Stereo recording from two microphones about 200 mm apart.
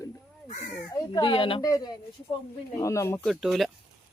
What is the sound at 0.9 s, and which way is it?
A child's voice, 20° left (ahead or behind).